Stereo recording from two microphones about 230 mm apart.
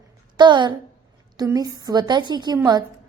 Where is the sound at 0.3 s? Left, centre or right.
Centre.